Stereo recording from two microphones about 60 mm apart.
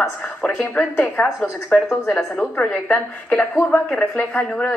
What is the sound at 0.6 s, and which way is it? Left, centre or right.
A woman's voice, left.